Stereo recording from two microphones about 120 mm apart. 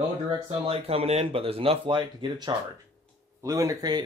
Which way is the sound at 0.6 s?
55° right (ahead or behind).